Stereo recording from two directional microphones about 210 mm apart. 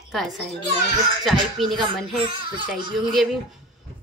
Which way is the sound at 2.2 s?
20° right (ahead or behind).